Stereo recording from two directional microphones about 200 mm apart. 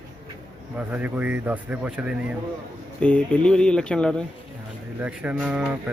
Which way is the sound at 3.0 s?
5° left (ahead or behind).